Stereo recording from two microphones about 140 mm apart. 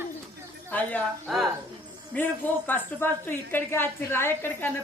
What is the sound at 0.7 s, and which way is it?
Speech, 10° left (ahead or behind).